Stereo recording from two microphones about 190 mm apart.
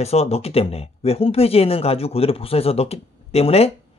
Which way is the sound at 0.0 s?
35° left (ahead or behind).